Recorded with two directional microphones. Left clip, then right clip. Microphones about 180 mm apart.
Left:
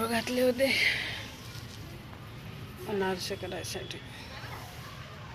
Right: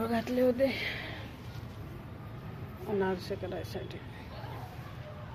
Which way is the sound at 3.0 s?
5° right (ahead or behind).